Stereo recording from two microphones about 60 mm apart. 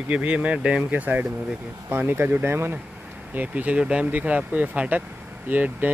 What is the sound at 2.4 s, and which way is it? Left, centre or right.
Speech, right.